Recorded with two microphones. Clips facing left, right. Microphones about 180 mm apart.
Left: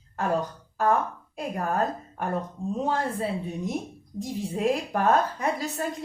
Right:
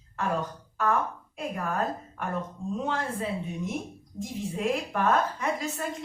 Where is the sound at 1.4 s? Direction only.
35° left (ahead or behind).